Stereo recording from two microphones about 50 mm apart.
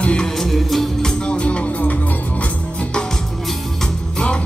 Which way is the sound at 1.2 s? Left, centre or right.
Left.